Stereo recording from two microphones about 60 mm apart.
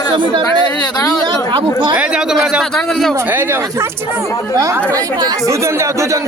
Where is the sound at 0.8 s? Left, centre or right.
Left.